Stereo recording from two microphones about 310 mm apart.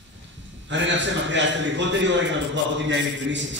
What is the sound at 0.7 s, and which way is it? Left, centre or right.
A man's voice, right.